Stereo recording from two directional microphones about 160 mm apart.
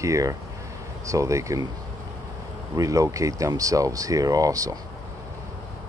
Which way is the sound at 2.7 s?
20° right (ahead or behind).